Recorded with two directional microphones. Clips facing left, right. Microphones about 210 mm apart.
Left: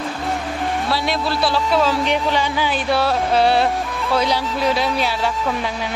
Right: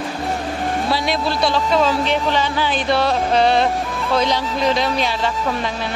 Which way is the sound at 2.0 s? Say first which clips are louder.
Even; 10° left (ahead or behind).